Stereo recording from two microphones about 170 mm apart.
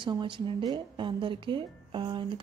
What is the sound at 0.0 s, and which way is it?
A woman's voice, 25° right (ahead or behind).